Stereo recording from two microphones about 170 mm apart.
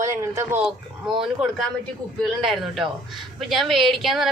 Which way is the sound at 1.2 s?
Centre (ahead or behind).